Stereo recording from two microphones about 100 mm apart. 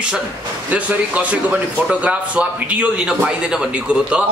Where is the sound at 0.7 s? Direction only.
15° right (ahead or behind).